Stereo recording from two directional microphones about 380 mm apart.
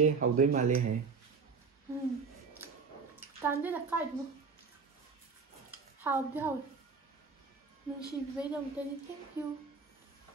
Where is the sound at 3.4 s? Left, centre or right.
Centre.